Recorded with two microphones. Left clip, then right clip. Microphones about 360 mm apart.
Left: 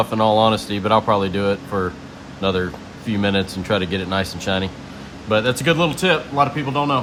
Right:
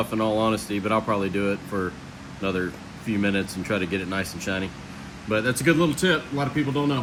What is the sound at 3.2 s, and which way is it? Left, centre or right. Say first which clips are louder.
Speech: left 6 dB; left.